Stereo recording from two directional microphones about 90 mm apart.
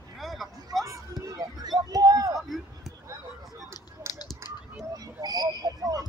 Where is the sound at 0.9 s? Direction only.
40° right (ahead or behind).